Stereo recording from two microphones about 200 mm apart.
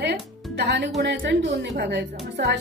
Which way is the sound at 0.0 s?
60° right (ahead or behind).